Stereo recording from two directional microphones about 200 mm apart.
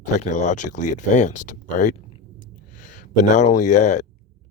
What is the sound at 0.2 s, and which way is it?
Speech, 35° left (ahead or behind).